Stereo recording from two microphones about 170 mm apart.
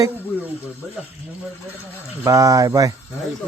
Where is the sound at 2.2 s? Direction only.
20° right (ahead or behind).